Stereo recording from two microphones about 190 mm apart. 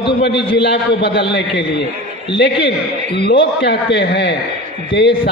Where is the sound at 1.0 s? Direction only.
65° left (ahead or behind).